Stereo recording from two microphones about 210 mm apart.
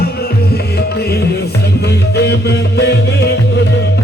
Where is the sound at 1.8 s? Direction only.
55° left (ahead or behind).